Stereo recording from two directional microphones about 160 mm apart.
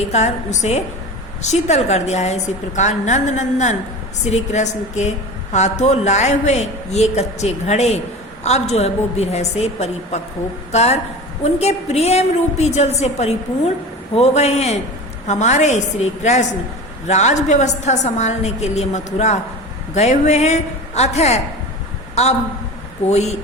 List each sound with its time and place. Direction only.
0.1 s a woman's voice: 45° left (ahead or behind)